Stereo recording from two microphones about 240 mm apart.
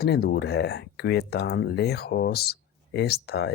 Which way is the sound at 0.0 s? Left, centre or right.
Left.